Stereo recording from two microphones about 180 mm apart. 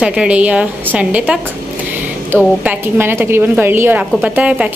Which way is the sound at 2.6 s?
10° right (ahead or behind).